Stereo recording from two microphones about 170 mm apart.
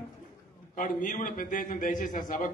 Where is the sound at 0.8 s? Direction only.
50° left (ahead or behind).